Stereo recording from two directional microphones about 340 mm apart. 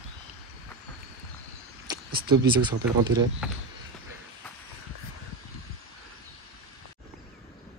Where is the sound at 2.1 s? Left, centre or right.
Right.